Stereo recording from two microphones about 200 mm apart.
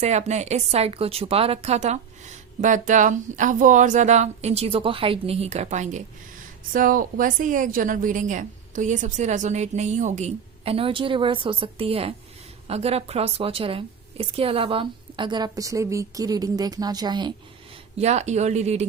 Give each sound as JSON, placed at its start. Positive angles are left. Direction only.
{"t": 0.0, "sound": "a woman's voice", "side_deg": -35}
{"t": 17.9, "sound": "a woman's voice", "side_deg": -35}